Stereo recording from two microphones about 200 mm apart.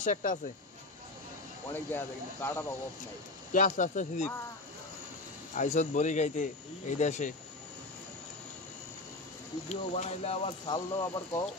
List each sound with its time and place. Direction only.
0.0 s speech: 40° left (ahead or behind)
1.7 s speech: 10° left (ahead or behind)
3.5 s speech: 40° left (ahead or behind)
5.5 s speech: 35° left (ahead or behind)
9.7 s speech: 30° left (ahead or behind)